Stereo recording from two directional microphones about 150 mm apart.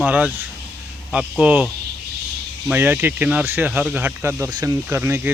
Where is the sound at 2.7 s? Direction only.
10° right (ahead or behind).